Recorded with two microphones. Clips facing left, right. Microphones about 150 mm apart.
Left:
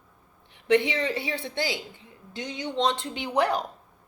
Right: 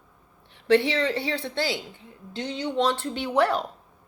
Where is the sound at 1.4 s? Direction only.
20° left (ahead or behind).